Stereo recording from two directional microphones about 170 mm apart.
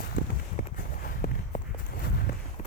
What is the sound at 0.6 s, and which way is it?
Walk, 60° left (ahead or behind).